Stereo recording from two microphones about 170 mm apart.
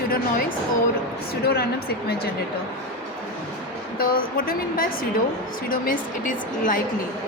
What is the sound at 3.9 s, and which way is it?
Speech, 60° left (ahead or behind).